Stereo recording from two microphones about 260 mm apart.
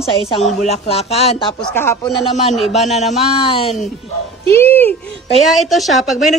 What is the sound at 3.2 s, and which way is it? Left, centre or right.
Speech, left.